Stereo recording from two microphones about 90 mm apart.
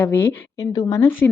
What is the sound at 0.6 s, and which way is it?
Speech, 40° left (ahead or behind).